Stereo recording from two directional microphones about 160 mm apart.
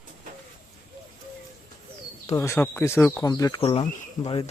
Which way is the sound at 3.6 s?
35° left (ahead or behind).